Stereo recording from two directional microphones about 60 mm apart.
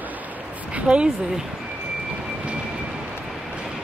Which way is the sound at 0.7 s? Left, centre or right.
Centre.